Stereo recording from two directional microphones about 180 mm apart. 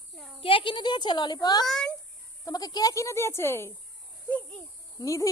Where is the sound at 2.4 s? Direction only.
20° left (ahead or behind).